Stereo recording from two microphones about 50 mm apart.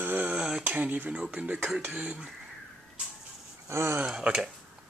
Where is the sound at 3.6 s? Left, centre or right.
Right.